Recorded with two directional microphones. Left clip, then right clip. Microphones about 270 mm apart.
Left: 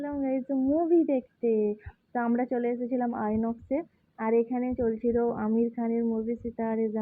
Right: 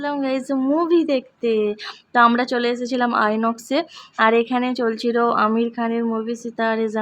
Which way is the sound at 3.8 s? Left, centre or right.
Centre.